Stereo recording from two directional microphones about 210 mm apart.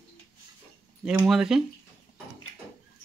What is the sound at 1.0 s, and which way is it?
Speech, 5° right (ahead or behind).